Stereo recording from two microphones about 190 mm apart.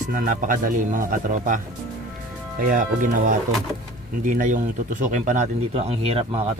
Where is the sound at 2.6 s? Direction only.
45° right (ahead or behind).